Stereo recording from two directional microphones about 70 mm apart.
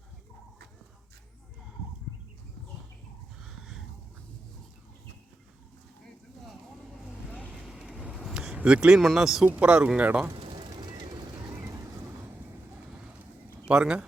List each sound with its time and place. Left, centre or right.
3.4 s a sound: centre
7.3 s vehicle: centre
7.5 s vehicle: centre
8.0 s a sound: centre
9.0 s speech: centre
9.5 s speech: centre
10.7 s vehicle: right
13.7 s speech: centre